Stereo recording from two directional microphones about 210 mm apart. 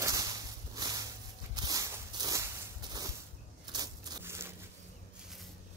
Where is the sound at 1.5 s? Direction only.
20° right (ahead or behind).